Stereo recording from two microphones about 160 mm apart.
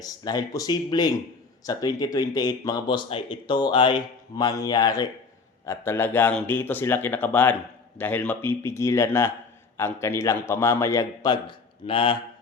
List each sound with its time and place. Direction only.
0.0 s speech: 25° left (ahead or behind)